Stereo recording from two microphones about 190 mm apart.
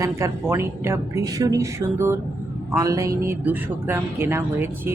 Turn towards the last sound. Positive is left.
turn(degrees=-10)  # may be behind; listen again after turning